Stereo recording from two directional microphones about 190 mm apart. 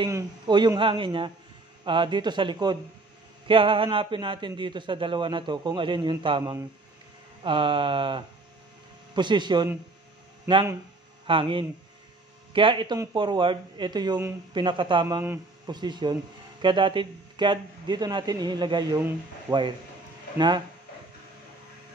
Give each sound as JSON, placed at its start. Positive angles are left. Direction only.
{"t": 0.0, "sound": "speech", "side_deg": -25}